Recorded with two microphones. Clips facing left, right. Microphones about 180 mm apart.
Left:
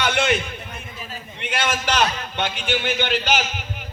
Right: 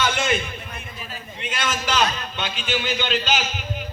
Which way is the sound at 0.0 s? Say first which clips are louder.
Left 2 dB; 70° left (ahead or behind).